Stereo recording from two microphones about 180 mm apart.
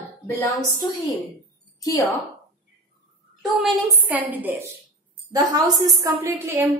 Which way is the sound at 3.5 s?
Centre (ahead or behind).